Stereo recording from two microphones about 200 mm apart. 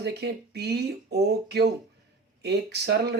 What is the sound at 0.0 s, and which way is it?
Speech, 55° right (ahead or behind).